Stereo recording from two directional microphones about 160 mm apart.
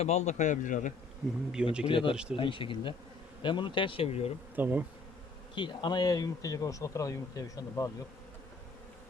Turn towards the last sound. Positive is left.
turn(degrees=20)  # may be behind; listen again after turning